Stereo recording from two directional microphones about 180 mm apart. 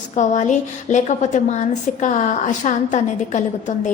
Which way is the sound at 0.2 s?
45° left (ahead or behind).